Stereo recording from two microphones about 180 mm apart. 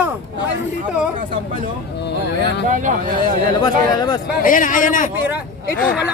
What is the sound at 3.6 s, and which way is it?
Speech, 20° left (ahead or behind).